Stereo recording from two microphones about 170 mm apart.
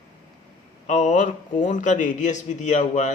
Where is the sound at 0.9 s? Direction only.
45° left (ahead or behind).